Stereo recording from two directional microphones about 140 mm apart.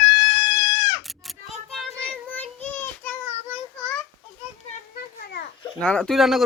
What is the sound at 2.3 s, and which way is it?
Child singing, 10° left (ahead or behind).